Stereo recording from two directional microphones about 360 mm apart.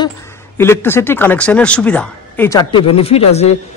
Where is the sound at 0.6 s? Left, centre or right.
Centre.